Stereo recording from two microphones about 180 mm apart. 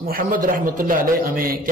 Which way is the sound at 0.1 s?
50° right (ahead or behind).